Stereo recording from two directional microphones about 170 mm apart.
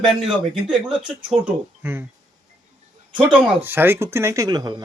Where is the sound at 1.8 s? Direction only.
15° right (ahead or behind).